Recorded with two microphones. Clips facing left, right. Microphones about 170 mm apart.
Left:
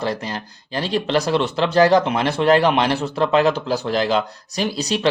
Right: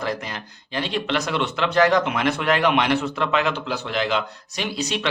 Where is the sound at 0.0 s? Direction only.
30° left (ahead or behind).